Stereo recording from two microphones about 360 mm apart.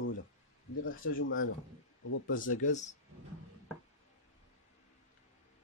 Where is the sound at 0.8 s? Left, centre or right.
Left.